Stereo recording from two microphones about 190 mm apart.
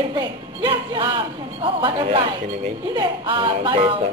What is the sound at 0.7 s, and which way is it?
A man's voice, 25° right (ahead or behind).